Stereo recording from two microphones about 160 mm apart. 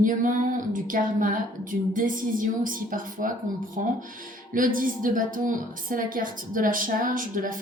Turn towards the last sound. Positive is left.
turn(degrees=-60)  # may be behind; listen again after turning